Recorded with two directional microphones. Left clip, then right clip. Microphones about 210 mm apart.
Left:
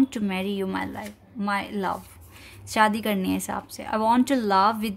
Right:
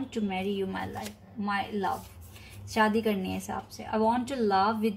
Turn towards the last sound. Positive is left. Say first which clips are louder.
# left 4 dB
turn(degrees=50)  # may be behind; listen again after turning